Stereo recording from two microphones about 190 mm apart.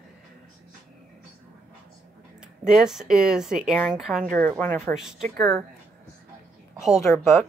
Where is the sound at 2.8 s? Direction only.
Centre (ahead or behind).